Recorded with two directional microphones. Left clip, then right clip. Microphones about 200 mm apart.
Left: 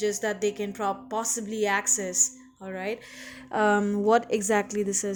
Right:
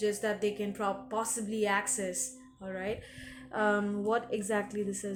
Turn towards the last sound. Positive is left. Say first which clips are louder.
# left 8 dB
turn(degrees=45)  # may be behind; listen again after turning